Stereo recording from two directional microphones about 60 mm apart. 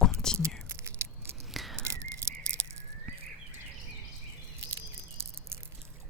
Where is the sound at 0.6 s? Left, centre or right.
Right.